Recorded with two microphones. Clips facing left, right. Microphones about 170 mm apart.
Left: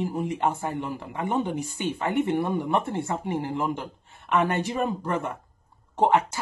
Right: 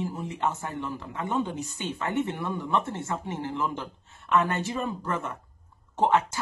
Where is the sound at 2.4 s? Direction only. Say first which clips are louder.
Left 5 dB; 60° left (ahead or behind).